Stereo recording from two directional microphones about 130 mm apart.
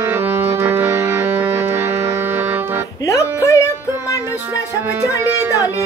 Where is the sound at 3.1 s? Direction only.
25° left (ahead or behind).